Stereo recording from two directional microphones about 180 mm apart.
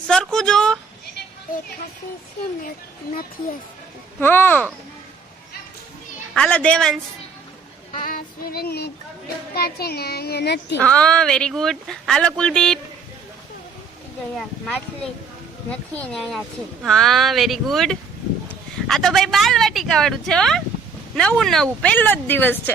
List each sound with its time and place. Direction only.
0.1 s a sound: 5° left (ahead or behind)
4.2 s speech: 10° left (ahead or behind)
6.3 s speech: 5° left (ahead or behind)
7.9 s a child's voice: 50° left (ahead or behind); by 10.8 s 70° left (ahead or behind)
10.8 s speech: 5° left (ahead or behind)
15.7 s speech: 5° left (ahead or behind)